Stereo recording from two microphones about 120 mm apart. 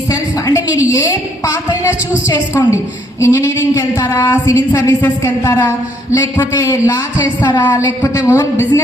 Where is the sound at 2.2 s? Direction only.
30° left (ahead or behind).